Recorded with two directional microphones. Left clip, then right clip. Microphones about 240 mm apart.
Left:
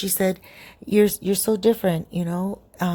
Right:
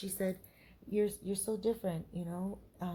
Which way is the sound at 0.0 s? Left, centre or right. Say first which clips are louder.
Left 15 dB; left.